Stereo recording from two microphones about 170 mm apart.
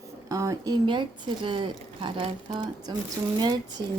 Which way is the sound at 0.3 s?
20° right (ahead or behind).